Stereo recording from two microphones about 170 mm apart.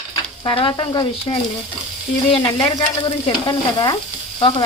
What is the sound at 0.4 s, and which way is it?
Frying, 25° left (ahead or behind).